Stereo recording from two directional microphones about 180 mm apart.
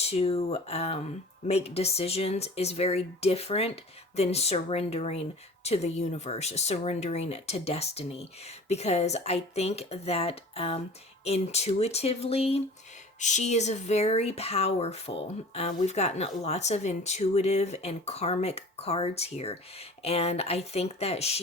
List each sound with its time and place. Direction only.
0.0 s speech: 35° left (ahead or behind)